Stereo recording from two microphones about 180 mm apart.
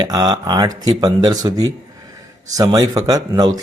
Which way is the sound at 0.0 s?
20° right (ahead or behind).